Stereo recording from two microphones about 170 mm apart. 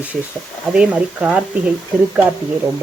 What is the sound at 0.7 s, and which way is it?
Speech, 5° right (ahead or behind).